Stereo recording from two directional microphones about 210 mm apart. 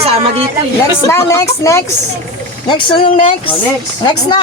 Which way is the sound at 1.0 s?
15° left (ahead or behind).